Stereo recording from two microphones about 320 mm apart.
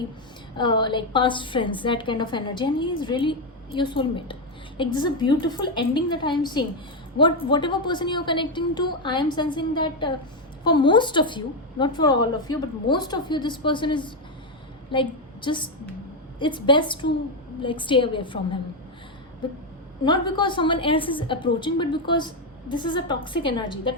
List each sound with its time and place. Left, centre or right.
0.5 s a woman's voice: centre
20.1 s a woman's voice: centre